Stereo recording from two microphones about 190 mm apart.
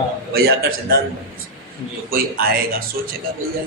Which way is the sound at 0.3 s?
55° right (ahead or behind).